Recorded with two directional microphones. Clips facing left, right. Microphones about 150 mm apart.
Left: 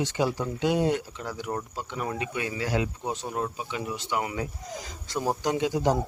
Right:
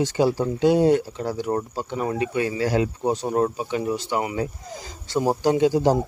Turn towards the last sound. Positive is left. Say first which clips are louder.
# right 6 dB
turn(degrees=-30)  # may be behind; listen again after turning